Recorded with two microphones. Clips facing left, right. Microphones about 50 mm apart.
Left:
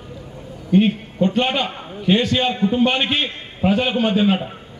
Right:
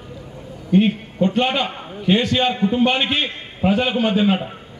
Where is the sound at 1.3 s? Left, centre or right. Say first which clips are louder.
Right 1 dB; centre.